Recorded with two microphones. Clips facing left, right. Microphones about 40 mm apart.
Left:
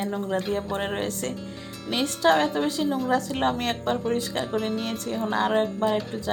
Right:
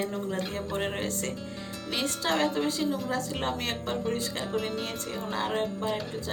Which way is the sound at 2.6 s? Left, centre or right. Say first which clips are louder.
Left 5 dB; left.